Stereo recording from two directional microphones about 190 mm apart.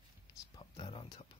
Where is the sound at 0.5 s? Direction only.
25° left (ahead or behind).